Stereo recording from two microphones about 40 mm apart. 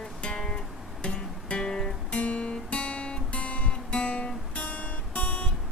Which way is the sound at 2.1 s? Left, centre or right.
Left.